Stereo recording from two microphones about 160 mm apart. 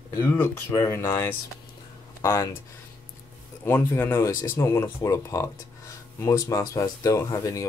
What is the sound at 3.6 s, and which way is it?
Speech, 15° left (ahead or behind).